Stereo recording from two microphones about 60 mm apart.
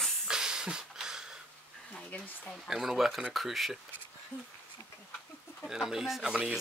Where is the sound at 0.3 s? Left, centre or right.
Centre.